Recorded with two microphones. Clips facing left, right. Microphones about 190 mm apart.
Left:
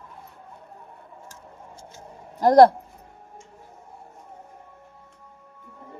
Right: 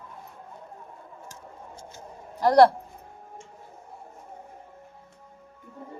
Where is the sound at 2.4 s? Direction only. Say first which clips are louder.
Left 3 dB; 45° left (ahead or behind).